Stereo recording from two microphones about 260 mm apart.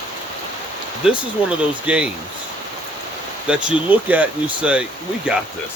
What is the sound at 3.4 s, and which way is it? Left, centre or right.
Speech, centre.